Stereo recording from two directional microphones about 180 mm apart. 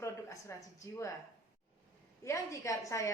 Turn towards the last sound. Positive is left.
turn(degrees=15)  # may be behind; listen again after turning